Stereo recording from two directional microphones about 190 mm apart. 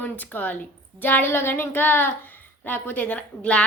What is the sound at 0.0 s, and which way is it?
A woman's voice, 10° left (ahead or behind).